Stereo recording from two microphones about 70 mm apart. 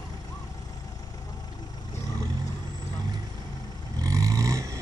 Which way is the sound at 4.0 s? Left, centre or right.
Right.